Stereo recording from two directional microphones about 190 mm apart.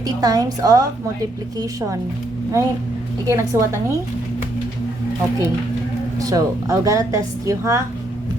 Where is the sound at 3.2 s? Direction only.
15° right (ahead or behind).